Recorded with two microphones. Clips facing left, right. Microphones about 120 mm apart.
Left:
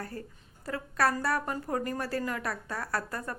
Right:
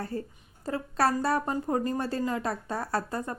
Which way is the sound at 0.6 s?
25° right (ahead or behind).